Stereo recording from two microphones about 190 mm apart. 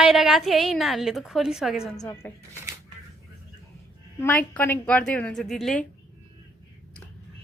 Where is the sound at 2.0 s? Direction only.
10° left (ahead or behind).